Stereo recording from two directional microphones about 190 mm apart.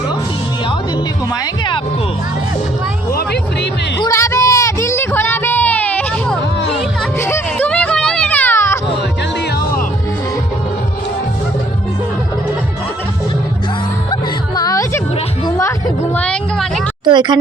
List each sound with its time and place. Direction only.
3.1 s music: 60° left (ahead or behind)
4.0 s a sound: 15° left (ahead or behind)
14.1 s music: 20° left (ahead or behind)
16.1 s vehicle: 5° left (ahead or behind)
17.1 s speech: 25° right (ahead or behind)